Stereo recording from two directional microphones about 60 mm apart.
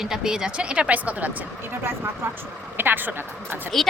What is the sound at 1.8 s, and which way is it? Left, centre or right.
Speech, right.